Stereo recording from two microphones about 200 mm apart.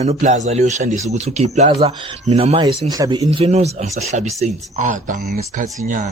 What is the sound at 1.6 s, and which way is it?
Speech, 25° right (ahead or behind).